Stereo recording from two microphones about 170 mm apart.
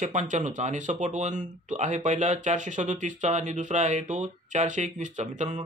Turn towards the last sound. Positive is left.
turn(degrees=-45)  # may be behind; listen again after turning